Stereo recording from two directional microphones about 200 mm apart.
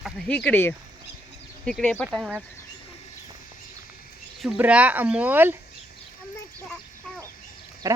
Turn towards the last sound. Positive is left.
turn(degrees=-15)  # may be behind; listen again after turning